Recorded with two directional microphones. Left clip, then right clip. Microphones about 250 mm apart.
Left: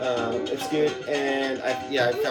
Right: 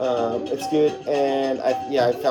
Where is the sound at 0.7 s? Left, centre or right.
Centre.